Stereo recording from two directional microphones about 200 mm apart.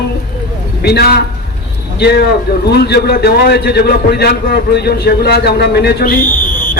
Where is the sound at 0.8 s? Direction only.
55° left (ahead or behind).